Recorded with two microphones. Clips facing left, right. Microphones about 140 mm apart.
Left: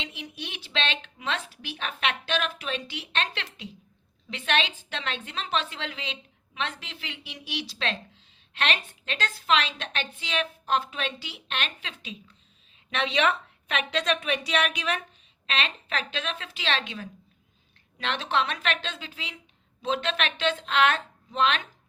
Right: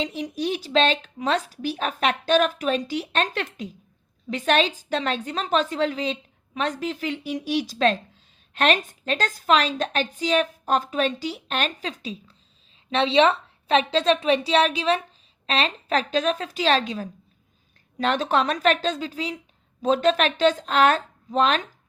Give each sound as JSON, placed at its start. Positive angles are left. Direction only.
{"t": 0.0, "sound": "a woman's voice", "side_deg": -40}